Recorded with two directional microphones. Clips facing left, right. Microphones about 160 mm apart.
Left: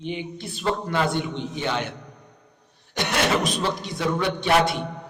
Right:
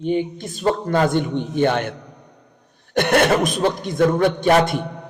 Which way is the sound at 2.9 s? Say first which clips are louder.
Right 7 dB; 55° right (ahead or behind).